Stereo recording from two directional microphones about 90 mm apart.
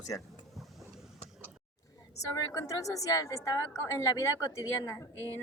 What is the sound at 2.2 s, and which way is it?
A woman's voice, 35° left (ahead or behind).